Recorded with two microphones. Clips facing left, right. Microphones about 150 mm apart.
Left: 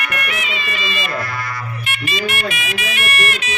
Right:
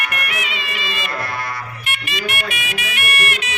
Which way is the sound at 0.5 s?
60° right (ahead or behind).